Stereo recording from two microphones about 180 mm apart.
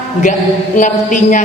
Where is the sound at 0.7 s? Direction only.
45° left (ahead or behind).